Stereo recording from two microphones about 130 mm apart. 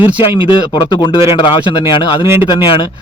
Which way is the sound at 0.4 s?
30° left (ahead or behind).